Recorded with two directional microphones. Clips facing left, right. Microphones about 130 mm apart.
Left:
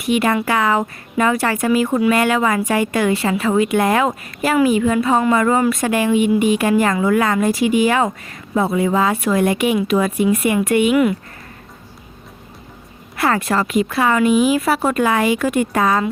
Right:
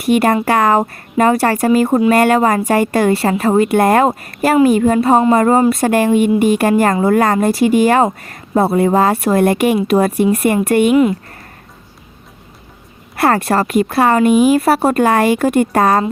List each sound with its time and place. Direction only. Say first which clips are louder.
0.0 s a woman's voice: right 4 dB; 45° right (ahead or behind)
6.4 s a woman's voice: right 3 dB; 45° right (ahead or behind)
10.2 s a woman's voice: right 3 dB; 40° right (ahead or behind)
10.9 s speech: right 4 dB; 25° right (ahead or behind)
13.3 s a woman's voice: right 2 dB; 40° right (ahead or behind)
14.9 s a woman's voice: right 4 dB; 50° right (ahead or behind)